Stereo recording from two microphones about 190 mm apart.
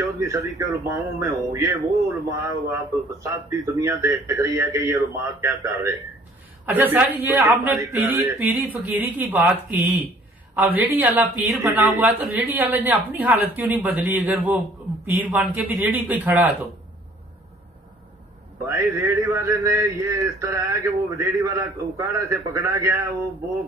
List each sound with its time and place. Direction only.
0.0 s speech: 15° right (ahead or behind)
18.9 s speech: 15° right (ahead or behind)